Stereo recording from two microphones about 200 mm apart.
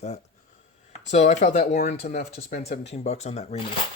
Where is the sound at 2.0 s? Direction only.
50° left (ahead or behind); by 3.6 s 35° left (ahead or behind).